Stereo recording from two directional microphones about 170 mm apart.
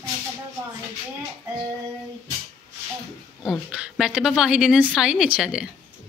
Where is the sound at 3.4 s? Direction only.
5° right (ahead or behind).